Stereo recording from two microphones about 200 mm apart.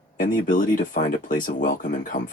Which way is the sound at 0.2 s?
45° left (ahead or behind).